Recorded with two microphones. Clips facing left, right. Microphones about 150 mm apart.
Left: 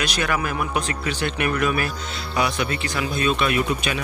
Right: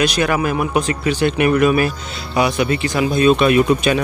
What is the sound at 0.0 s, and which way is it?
Speech, 20° right (ahead or behind).